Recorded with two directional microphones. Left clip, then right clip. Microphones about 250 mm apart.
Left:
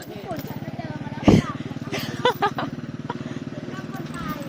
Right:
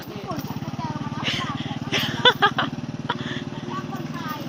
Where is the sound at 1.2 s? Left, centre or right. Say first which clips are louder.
Left 7 dB; centre.